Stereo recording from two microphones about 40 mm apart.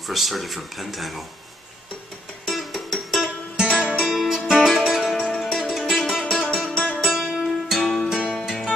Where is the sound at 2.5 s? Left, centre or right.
Centre.